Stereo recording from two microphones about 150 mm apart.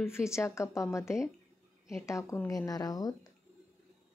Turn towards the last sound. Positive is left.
turn(degrees=25)  # may be behind; listen again after turning